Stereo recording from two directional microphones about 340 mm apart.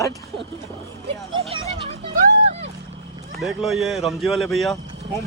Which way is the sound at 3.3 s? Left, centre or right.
Centre.